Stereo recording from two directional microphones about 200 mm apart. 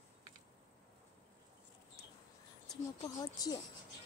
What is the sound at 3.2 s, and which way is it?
Speech, 20° left (ahead or behind).